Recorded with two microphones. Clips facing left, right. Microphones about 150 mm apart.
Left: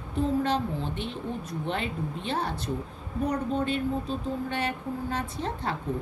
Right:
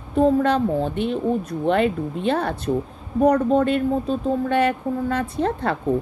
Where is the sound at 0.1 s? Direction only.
50° right (ahead or behind).